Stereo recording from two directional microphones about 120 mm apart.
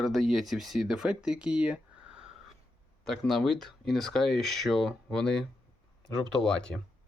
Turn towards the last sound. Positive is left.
turn(degrees=5)  # may be behind; listen again after turning